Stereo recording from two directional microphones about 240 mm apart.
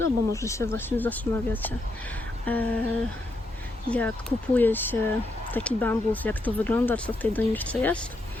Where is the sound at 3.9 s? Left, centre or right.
Centre.